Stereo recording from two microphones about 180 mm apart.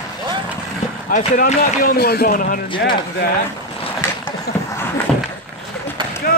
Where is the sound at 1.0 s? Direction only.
45° left (ahead or behind).